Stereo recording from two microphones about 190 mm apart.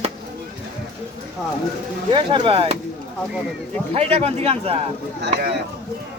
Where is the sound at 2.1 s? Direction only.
25° right (ahead or behind).